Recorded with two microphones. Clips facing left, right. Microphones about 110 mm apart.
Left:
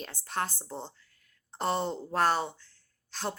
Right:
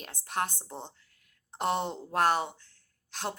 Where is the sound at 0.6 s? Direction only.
15° right (ahead or behind).